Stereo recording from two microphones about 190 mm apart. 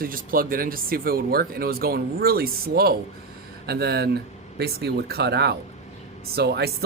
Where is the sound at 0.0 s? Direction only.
50° right (ahead or behind).